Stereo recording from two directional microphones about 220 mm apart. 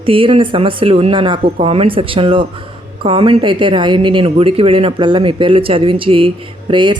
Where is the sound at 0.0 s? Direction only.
25° right (ahead or behind).